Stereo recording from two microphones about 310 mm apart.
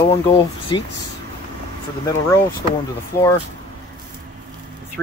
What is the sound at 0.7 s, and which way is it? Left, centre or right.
Speech, centre.